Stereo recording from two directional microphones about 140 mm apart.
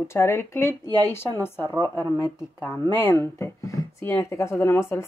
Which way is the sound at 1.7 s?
30° right (ahead or behind).